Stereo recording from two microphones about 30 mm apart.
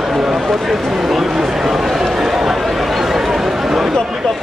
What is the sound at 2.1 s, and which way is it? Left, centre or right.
Chatter, centre.